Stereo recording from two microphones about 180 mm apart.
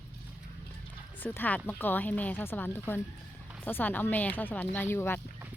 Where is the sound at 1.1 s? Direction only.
10° left (ahead or behind).